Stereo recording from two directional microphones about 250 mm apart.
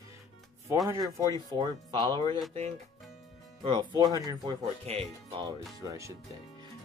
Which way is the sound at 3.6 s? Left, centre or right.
Centre.